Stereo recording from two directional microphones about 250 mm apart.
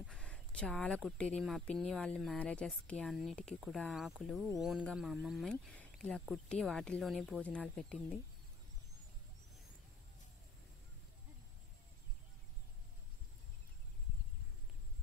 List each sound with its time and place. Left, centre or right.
0.0 s speech: centre